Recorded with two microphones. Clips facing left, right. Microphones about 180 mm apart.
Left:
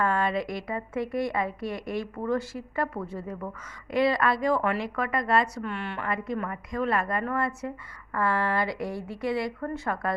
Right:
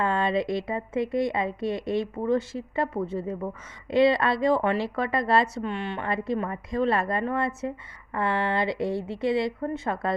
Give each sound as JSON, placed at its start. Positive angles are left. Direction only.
{"t": 0.0, "sound": "a woman's voice", "side_deg": -25}